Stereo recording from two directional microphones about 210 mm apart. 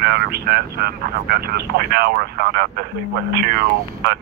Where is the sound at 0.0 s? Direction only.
50° right (ahead or behind).